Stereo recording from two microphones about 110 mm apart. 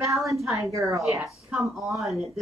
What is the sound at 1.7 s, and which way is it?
Speech, centre (ahead or behind).